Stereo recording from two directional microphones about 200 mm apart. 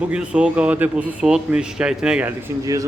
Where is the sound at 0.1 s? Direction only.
5° right (ahead or behind).